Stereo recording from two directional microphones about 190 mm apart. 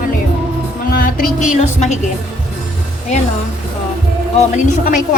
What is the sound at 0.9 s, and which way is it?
Speech, 50° left (ahead or behind).